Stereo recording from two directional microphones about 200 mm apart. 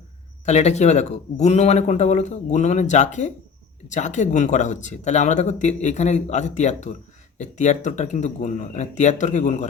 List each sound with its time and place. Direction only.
0.4 s speech: 35° left (ahead or behind)